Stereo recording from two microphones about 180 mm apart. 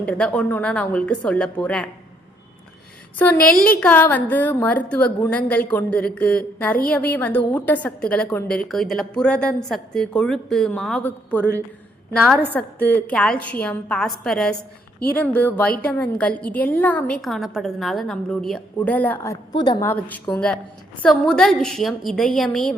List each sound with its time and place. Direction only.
0.0 s a woman's voice: 5° left (ahead or behind)
3.3 s a woman's voice: 55° left (ahead or behind)
3.8 s a woman's voice: 10° left (ahead or behind)
12.5 s a woman's voice: 10° left (ahead or behind)
19.9 s a woman's voice: 10° left (ahead or behind)